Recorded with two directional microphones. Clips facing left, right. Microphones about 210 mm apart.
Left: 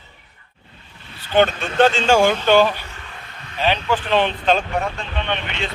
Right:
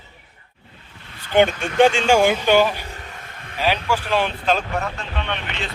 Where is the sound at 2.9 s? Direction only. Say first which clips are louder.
Right 2 dB; 40° right (ahead or behind).